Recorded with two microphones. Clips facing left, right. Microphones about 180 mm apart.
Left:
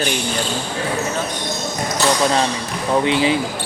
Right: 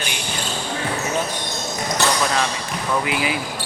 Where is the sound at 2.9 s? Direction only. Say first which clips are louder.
Left 6 dB; 30° left (ahead or behind).